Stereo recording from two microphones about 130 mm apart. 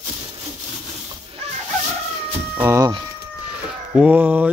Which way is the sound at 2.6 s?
25° right (ahead or behind).